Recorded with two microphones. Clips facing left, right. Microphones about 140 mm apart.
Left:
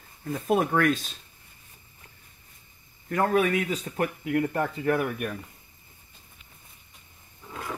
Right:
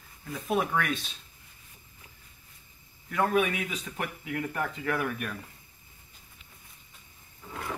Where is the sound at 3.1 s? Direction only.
40° left (ahead or behind); by 5.3 s 25° left (ahead or behind).